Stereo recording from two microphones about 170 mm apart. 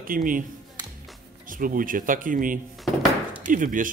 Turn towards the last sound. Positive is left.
turn(degrees=-50)  # may be behind; listen again after turning